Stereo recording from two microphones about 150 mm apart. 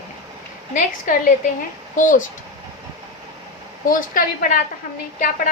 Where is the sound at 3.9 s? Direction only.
65° left (ahead or behind).